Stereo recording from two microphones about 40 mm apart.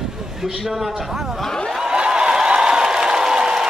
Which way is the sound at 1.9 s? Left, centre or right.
Right.